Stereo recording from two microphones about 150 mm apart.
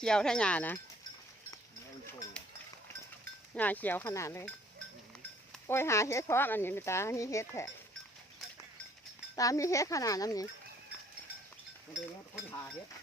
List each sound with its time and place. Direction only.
0.0 s speech: 5° left (ahead or behind)
3.5 s speech: 10° left (ahead or behind)
5.6 s speech: 15° left (ahead or behind)
9.3 s speech: 20° left (ahead or behind)